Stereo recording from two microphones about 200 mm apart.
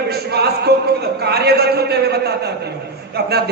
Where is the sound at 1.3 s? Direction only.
55° right (ahead or behind).